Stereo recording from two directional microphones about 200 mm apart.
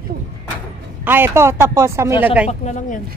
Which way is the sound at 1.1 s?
10° right (ahead or behind).